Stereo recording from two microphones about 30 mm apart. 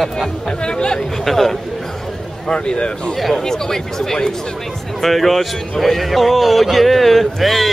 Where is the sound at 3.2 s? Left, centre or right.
Centre.